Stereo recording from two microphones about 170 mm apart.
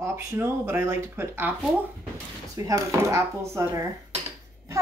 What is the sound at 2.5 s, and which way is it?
Dishes, 20° right (ahead or behind).